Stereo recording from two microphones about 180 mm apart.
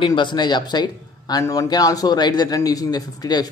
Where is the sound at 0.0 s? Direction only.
25° left (ahead or behind).